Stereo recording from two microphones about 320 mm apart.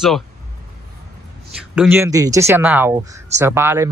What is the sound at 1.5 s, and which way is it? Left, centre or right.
Speech, centre.